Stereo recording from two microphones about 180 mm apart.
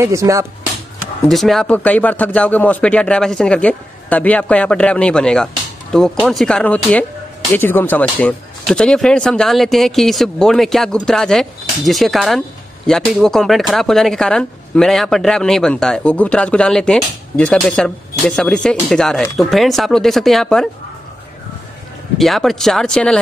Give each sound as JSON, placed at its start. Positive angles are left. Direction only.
{"t": 0.0, "sound": "speech", "side_deg": -15}
{"t": 1.3, "sound": "speech", "side_deg": 0}
{"t": 22.2, "sound": "speech", "side_deg": 0}